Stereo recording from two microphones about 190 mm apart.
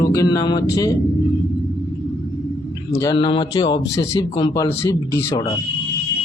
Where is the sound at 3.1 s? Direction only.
25° left (ahead or behind).